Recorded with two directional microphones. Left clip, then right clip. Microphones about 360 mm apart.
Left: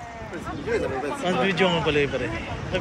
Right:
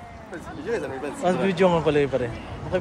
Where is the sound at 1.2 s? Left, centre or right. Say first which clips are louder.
Right 2 dB; centre.